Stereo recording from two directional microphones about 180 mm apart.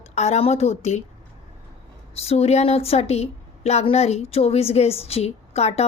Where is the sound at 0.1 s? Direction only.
40° left (ahead or behind).